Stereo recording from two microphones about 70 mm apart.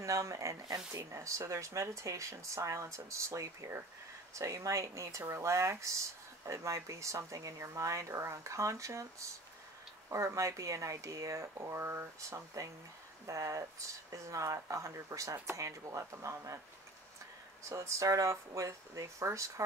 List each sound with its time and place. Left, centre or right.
0.0 s speech: right
17.6 s speech: right